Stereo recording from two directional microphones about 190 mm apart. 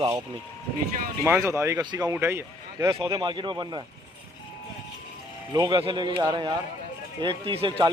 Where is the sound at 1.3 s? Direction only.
15° right (ahead or behind).